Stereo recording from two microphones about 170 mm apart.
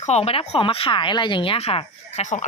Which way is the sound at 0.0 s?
40° left (ahead or behind).